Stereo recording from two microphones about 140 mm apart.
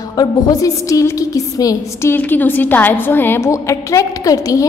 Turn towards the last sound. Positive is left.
turn(degrees=25)  # may be behind; listen again after turning